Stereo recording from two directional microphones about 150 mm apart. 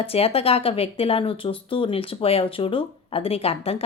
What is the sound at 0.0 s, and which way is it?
A woman's voice, 40° left (ahead or behind).